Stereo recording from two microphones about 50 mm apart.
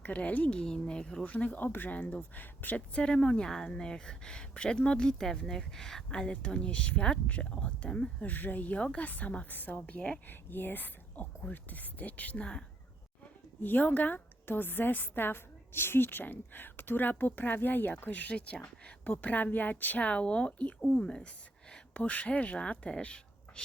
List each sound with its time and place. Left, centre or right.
0.0 s a woman's voice: left
0.5 s speech: centre
1.2 s a woman's voice: left
2.3 s a woman's voice: left
2.9 s speech: centre
8.2 s a woman's voice: left
10.2 s a woman's voice: left
13.6 s a woman's voice: left
20.1 s speech: left
21.9 s speech: left